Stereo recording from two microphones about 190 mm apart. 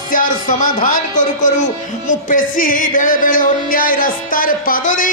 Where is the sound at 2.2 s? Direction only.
45° left (ahead or behind).